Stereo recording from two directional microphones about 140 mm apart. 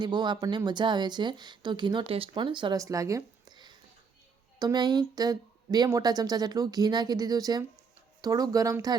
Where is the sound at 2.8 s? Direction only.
25° right (ahead or behind).